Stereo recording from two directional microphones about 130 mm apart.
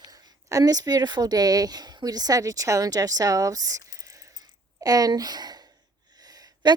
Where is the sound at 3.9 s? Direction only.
25° right (ahead or behind).